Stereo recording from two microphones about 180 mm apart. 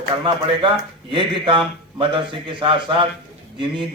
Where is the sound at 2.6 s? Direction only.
30° right (ahead or behind).